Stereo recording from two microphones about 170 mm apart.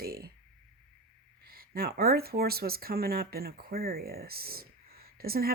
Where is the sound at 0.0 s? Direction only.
65° right (ahead or behind).